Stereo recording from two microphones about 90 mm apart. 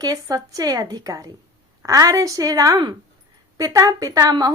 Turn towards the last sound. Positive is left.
turn(degrees=-45)  # may be behind; listen again after turning